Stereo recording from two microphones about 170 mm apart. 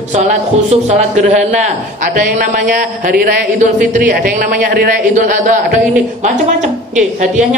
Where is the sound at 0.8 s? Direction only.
45° right (ahead or behind).